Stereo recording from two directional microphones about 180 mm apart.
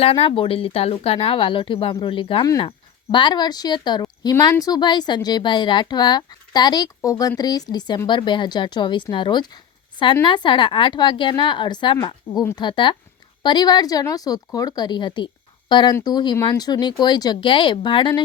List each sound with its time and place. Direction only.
0.0 s speech: 30° left (ahead or behind)